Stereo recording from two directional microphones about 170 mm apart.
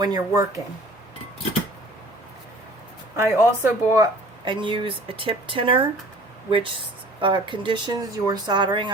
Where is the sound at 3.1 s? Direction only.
15° right (ahead or behind).